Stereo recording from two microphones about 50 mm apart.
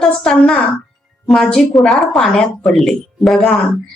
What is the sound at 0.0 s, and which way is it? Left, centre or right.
A woman's voice, centre.